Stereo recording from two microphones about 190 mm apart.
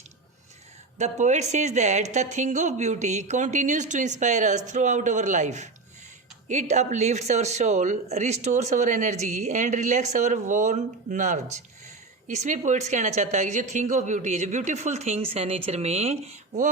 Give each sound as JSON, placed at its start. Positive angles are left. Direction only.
{"t": 0.9, "sound": "speech", "side_deg": -40}